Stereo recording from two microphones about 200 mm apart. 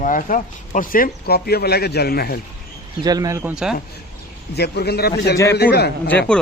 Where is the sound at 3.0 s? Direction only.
20° right (ahead or behind).